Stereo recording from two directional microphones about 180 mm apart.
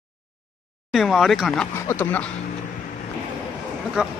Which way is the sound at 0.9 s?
Centre (ahead or behind).